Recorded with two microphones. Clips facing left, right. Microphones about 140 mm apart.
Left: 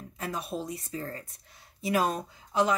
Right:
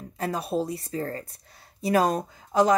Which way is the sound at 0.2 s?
35° right (ahead or behind).